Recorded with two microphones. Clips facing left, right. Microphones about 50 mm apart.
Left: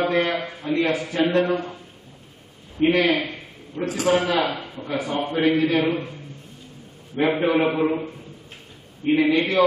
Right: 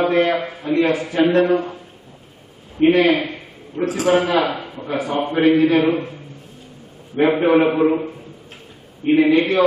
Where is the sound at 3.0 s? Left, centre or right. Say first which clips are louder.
Right 4 dB; centre.